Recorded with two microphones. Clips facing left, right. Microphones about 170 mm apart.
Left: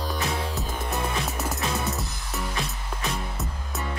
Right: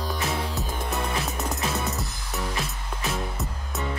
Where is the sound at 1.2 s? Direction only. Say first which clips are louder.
Even; centre (ahead or behind).